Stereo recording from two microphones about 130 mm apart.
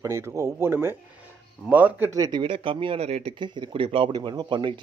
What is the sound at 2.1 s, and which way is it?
Speech, 30° right (ahead or behind).